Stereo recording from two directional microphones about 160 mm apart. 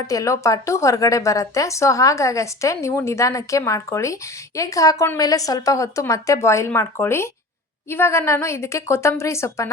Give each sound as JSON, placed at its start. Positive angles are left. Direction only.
{"t": 0.1, "sound": "a woman's voice", "side_deg": 20}